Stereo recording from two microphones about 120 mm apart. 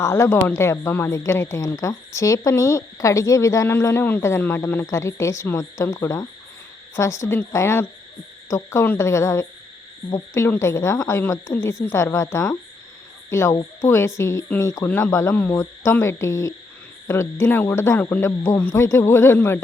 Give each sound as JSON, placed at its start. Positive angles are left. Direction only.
{"t": 0.0, "sound": "speech", "side_deg": 20}